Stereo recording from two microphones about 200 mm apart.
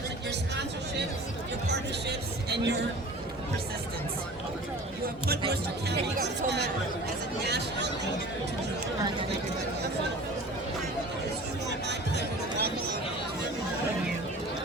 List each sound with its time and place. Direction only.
0.3 s music: 60° right (ahead or behind)
5.9 s speech: 55° right (ahead or behind)
11.7 s music: 60° right (ahead or behind)